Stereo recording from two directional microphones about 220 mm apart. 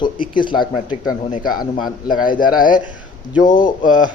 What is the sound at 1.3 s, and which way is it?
Speech, 40° left (ahead or behind).